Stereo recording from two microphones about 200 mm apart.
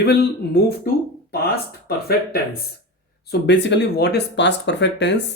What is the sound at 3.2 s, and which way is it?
Speech, 60° left (ahead or behind).